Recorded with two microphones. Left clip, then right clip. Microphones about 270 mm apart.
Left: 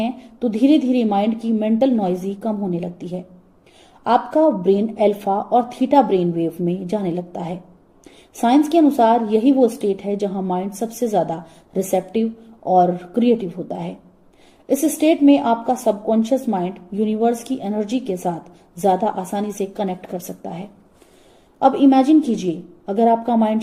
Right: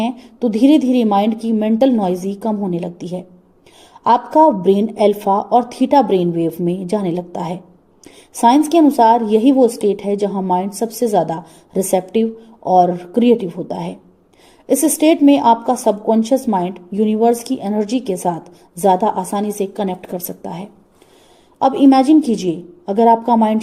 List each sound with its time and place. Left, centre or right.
0.0 s a woman's voice: right
14.9 s a woman's voice: right